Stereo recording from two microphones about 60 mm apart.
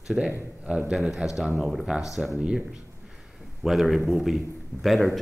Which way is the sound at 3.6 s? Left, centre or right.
Centre.